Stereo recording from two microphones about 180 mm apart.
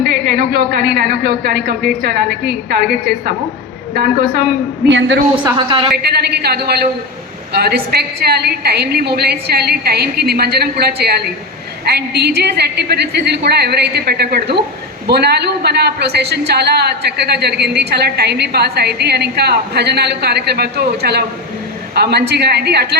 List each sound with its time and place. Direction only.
0.0 s a woman's voice: 60° right (ahead or behind)
4.9 s a woman's voice: 90° right
5.5 s a woman's voice: 25° right (ahead or behind)
6.0 s a woman's voice: 60° right (ahead or behind)